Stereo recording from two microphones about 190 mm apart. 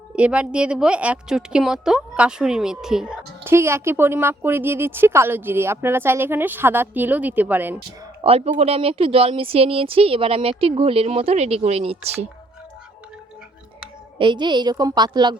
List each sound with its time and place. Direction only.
0.2 s a woman's voice: 5° right (ahead or behind)
8.2 s speech: 30° right (ahead or behind)
14.2 s speech: 25° right (ahead or behind)